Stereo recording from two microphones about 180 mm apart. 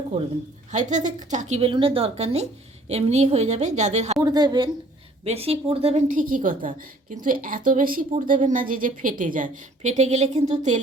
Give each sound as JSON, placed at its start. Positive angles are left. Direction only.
{"t": 0.1, "sound": "a woman's voice", "side_deg": -35}
{"t": 4.2, "sound": "a woman's voice", "side_deg": -20}
{"t": 5.2, "sound": "a woman's voice", "side_deg": -35}
{"t": 6.1, "sound": "a woman's voice", "side_deg": -50}